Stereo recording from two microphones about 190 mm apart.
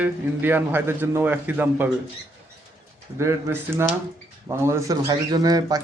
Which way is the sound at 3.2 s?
15° right (ahead or behind).